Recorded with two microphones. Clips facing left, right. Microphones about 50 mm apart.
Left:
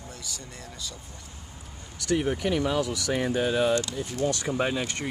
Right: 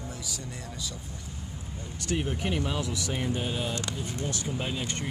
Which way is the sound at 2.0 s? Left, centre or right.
Left.